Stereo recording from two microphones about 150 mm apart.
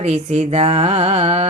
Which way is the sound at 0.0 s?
45° right (ahead or behind).